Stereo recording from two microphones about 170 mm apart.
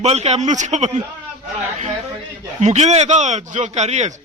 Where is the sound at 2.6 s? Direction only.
40° right (ahead or behind).